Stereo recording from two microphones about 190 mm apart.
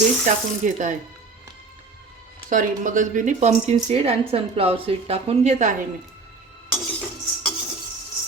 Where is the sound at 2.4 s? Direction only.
45° right (ahead or behind).